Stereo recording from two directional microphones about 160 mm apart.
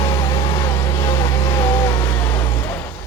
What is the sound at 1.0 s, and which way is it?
Vehicle, 25° left (ahead or behind).